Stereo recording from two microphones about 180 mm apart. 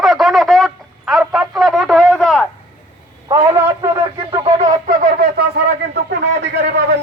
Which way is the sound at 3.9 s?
30° right (ahead or behind).